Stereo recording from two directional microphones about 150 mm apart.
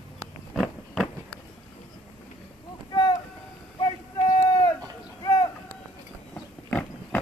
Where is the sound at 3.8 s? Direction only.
30° left (ahead or behind).